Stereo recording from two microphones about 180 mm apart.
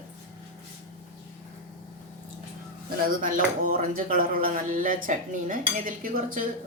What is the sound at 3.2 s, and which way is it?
Speech, 50° right (ahead or behind).